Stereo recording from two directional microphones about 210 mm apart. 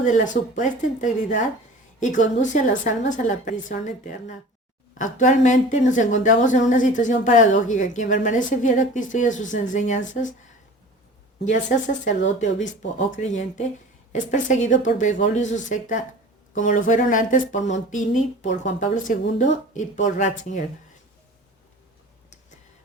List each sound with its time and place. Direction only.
0.0 s a woman's voice: 35° left (ahead or behind)
11.5 s a woman's voice: 35° left (ahead or behind)